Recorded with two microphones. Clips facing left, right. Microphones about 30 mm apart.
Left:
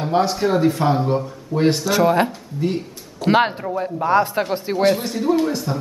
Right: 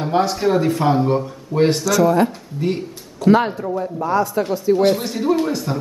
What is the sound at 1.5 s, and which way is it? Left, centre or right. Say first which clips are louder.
Speech: right 3 dB; right.